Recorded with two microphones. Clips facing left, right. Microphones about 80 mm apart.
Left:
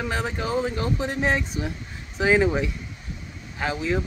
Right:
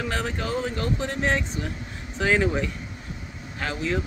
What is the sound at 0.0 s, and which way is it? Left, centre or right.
Speech, centre.